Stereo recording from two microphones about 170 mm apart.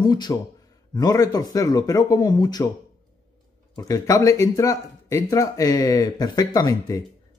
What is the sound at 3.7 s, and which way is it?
Speech, 20° left (ahead or behind).